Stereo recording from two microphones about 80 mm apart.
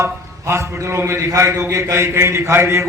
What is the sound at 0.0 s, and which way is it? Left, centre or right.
A man's voice, right.